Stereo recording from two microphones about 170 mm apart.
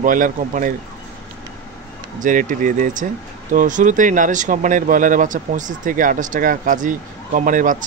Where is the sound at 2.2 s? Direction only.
50° right (ahead or behind).